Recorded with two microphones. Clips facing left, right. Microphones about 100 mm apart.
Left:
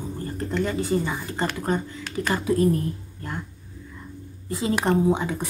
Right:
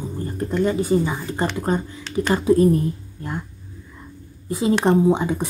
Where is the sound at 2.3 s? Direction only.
25° right (ahead or behind).